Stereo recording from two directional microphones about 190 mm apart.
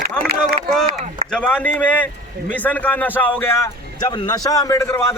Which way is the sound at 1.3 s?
5° left (ahead or behind).